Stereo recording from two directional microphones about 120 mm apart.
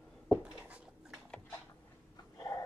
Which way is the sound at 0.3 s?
10° right (ahead or behind).